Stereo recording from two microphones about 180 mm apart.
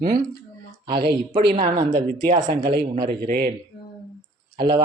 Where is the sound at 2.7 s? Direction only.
60° right (ahead or behind).